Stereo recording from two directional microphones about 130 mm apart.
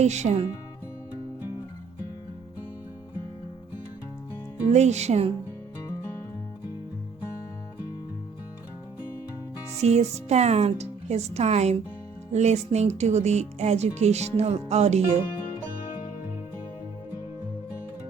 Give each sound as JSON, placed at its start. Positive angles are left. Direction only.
{"t": 0.0, "sound": "speech", "side_deg": -60}
{"t": 4.7, "sound": "speech", "side_deg": -60}
{"t": 9.7, "sound": "speech", "side_deg": -60}